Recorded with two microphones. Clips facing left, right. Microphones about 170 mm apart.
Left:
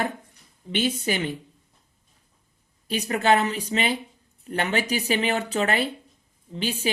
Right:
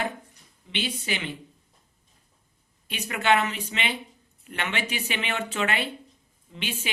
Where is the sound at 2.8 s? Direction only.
35° left (ahead or behind).